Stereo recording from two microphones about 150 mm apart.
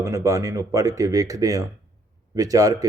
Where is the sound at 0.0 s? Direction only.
20° right (ahead or behind).